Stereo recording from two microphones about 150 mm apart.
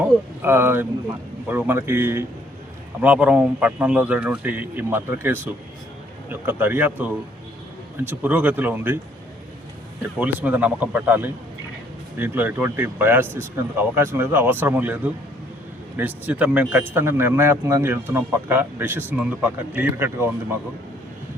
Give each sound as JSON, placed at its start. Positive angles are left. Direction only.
{"t": 0.0, "sound": "a man's voice", "side_deg": -15}
{"t": 10.2, "sound": "a man's voice", "side_deg": -10}